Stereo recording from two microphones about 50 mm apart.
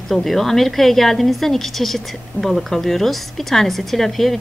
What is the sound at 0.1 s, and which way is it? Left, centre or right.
A woman's voice, centre.